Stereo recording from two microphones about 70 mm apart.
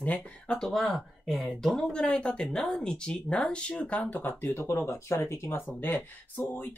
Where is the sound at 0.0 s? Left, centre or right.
Centre.